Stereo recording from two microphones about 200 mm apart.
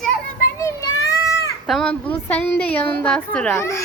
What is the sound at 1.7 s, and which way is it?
Speech, 5° left (ahead or behind).